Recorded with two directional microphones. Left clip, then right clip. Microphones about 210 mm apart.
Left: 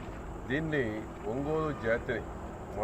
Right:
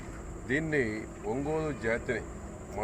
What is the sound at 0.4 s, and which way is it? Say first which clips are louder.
A man's voice: right 2 dB; 10° right (ahead or behind).